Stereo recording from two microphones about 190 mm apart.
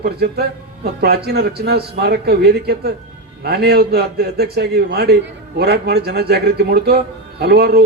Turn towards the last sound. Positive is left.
turn(degrees=-55)  # may be behind; listen again after turning